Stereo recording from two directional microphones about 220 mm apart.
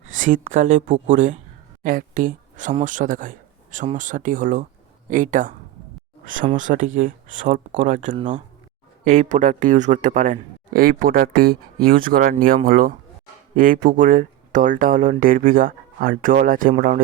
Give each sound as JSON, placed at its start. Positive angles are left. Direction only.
{"t": 0.2, "sound": "speech", "side_deg": -35}